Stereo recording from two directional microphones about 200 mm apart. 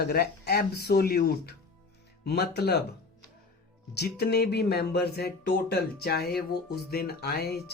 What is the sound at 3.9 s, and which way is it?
Speech, 55° left (ahead or behind).